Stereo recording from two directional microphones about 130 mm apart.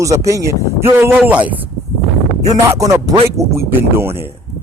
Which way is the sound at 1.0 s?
15° right (ahead or behind).